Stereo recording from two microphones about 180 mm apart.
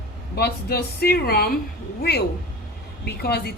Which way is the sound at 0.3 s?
60° left (ahead or behind).